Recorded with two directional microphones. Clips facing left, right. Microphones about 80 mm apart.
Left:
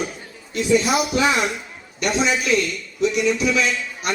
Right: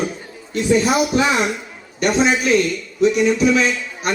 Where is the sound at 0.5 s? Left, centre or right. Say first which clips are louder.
Right 2 dB; right.